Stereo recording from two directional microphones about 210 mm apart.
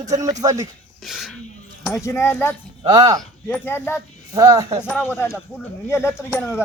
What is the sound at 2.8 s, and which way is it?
Speech, 15° right (ahead or behind).